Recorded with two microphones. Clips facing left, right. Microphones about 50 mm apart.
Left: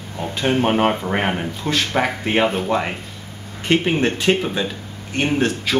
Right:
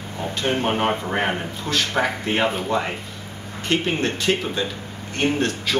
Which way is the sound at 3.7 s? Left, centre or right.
Centre.